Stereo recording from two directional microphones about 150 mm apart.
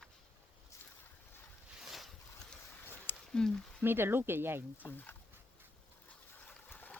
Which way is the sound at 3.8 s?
15° right (ahead or behind).